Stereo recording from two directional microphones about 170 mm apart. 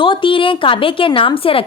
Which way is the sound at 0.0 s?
30° left (ahead or behind).